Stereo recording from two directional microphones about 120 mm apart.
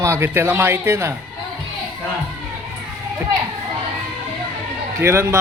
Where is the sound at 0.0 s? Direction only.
20° right (ahead or behind).